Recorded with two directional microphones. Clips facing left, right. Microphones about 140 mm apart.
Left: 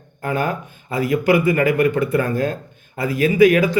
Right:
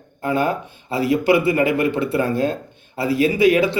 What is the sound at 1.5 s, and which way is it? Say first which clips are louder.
Speech: left 1 dB; 25° right (ahead or behind).